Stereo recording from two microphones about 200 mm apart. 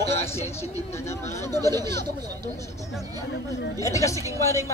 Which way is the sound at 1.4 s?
20° right (ahead or behind).